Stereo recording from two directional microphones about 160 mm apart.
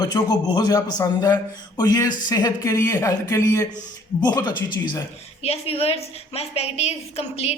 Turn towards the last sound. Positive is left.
turn(degrees=40)  # may be behind; listen again after turning